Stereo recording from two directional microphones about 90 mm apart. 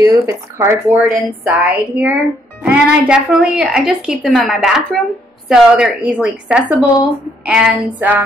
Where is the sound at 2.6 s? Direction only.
10° right (ahead or behind).